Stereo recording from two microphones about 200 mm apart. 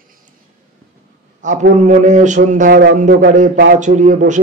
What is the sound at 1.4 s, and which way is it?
A man's voice, 40° right (ahead or behind).